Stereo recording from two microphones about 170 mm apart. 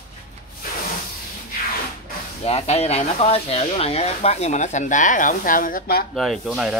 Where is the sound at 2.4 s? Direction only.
35° left (ahead or behind); by 6.0 s 55° left (ahead or behind).